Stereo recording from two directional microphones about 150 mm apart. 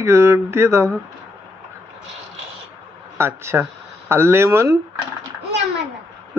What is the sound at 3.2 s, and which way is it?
Speech, 15° right (ahead or behind).